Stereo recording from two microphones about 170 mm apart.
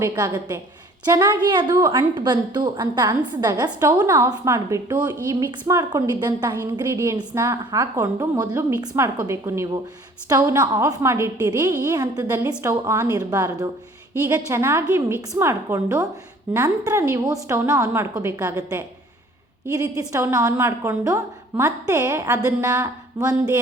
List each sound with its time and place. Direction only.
0.0 s a woman's voice: 20° right (ahead or behind)